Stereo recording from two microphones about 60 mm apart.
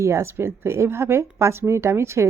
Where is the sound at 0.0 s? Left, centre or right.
Right.